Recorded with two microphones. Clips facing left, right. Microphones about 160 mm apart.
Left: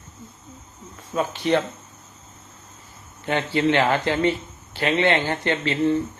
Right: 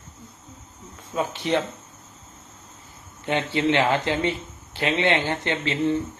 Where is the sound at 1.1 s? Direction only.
20° right (ahead or behind).